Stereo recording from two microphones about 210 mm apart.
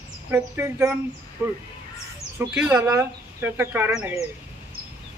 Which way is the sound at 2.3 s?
10° right (ahead or behind).